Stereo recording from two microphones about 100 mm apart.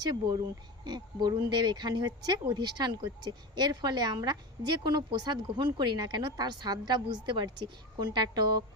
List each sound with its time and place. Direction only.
0.0 s speech: 45° right (ahead or behind)